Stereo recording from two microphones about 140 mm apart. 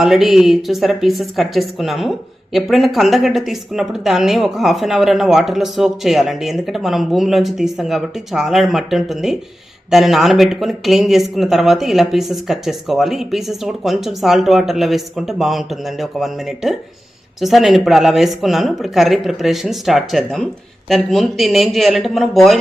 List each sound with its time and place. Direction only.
0.0 s a woman's voice: centre (ahead or behind)